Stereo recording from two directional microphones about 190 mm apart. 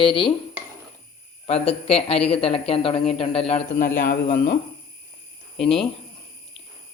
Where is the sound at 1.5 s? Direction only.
30° left (ahead or behind).